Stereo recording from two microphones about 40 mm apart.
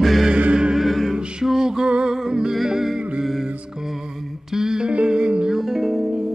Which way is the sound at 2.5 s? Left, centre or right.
Centre.